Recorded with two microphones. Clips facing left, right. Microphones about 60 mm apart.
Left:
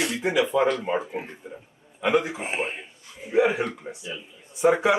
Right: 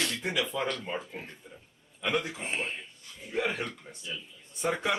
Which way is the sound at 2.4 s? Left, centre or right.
Left.